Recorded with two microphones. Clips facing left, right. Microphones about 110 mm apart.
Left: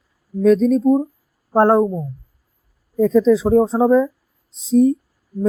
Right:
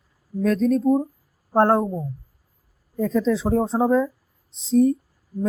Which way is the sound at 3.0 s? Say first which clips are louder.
Left 7 dB; 15° left (ahead or behind).